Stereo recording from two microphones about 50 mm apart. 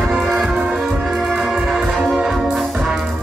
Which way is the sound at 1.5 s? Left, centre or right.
Centre.